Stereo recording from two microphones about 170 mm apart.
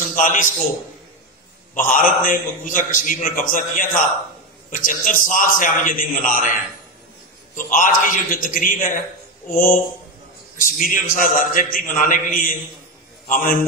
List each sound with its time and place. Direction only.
0.1 s a man's voice: 50° left (ahead or behind)
1.9 s a man's voice: 50° left (ahead or behind)